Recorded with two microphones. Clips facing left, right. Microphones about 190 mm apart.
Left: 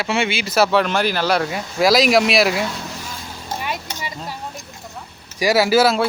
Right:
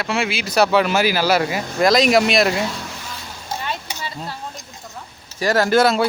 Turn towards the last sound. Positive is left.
turn(degrees=0)  # may be behind; listen again after turning